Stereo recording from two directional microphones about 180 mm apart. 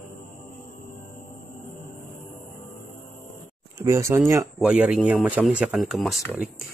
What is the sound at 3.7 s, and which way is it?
Speech, 15° right (ahead or behind).